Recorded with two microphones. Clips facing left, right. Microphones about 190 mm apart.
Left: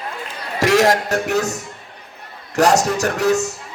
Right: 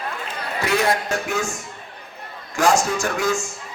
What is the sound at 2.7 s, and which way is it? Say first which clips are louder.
Speech: right 1 dB; 40° left (ahead or behind).